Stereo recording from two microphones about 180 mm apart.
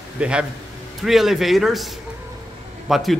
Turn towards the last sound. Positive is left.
turn(degrees=0)  # may be behind; listen again after turning